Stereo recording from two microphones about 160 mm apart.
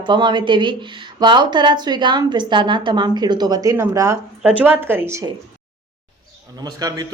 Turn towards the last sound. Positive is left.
turn(degrees=-20)  # may be behind; listen again after turning